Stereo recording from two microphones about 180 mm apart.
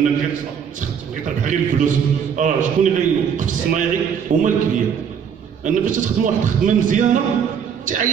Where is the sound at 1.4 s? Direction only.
45° right (ahead or behind).